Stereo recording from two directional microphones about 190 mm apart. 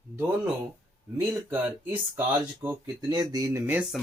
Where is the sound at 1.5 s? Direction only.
10° right (ahead or behind).